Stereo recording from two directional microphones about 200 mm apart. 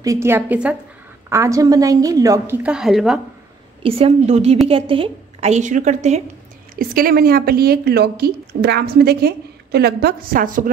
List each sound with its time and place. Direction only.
0.0 s a woman's voice: 15° right (ahead or behind)
3.8 s a woman's voice: 30° right (ahead or behind)
6.7 s a woman's voice: 45° right (ahead or behind)